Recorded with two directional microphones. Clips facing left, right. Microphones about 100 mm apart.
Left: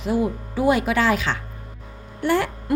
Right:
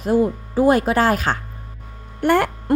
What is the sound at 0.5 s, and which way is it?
A woman's voice, 40° right (ahead or behind).